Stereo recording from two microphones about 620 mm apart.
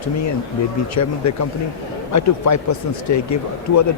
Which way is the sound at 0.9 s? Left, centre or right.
Left.